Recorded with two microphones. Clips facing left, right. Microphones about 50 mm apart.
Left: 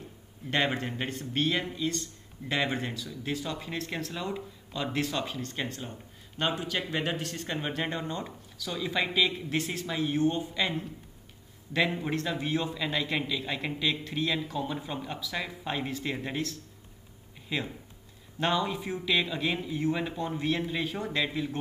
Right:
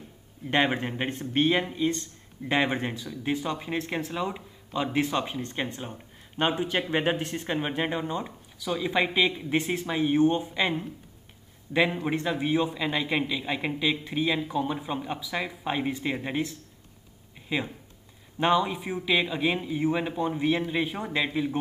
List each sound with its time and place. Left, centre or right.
0.5 s a man's voice: centre
18.4 s a man's voice: centre